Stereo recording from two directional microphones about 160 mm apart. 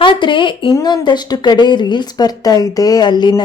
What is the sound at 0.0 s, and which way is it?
A woman's voice, 30° left (ahead or behind).